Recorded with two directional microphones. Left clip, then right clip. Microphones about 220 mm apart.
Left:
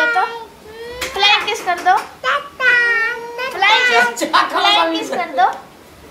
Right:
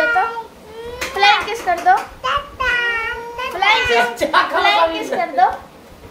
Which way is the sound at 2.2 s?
15° right (ahead or behind).